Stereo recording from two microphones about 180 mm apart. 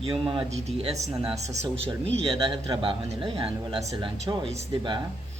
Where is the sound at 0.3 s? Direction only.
30° right (ahead or behind).